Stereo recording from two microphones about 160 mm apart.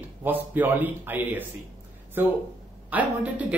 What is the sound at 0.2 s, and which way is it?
Speech, 10° right (ahead or behind).